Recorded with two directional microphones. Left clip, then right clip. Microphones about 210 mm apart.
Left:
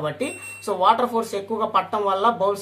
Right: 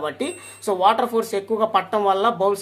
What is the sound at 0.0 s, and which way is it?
Speech, 50° right (ahead or behind).